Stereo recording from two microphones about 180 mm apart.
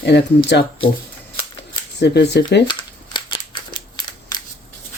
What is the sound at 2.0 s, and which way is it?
Speech, 70° left (ahead or behind).